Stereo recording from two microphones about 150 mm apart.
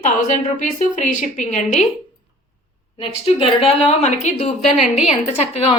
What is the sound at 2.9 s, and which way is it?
A woman's voice, 40° left (ahead or behind).